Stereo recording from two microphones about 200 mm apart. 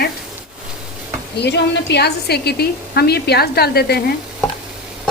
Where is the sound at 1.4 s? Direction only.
60° left (ahead or behind).